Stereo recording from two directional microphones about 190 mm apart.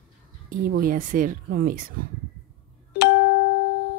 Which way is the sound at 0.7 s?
50° right (ahead or behind).